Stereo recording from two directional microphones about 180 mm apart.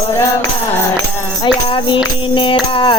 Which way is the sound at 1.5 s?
25° left (ahead or behind).